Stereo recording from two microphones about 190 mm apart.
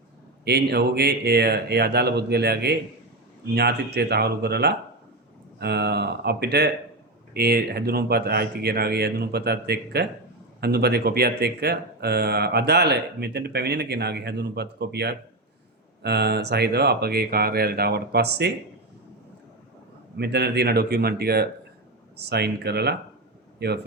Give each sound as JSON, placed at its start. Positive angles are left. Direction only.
{"t": 0.4, "sound": "speech", "side_deg": -60}
{"t": 20.1, "sound": "a man's voice", "side_deg": -60}